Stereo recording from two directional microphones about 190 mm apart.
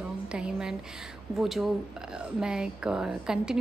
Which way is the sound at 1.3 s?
Centre (ahead or behind).